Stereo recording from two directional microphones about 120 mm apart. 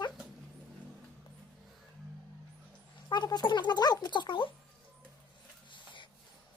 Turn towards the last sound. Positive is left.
turn(degrees=40)  # may be behind; listen again after turning